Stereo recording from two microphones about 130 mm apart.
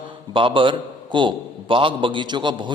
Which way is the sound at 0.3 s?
40° right (ahead or behind).